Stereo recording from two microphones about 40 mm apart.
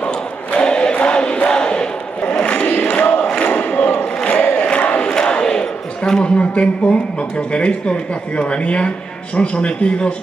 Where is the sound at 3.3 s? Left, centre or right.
Left.